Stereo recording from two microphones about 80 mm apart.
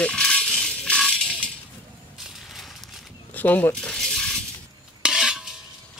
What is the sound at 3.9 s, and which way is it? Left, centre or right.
Coin, centre.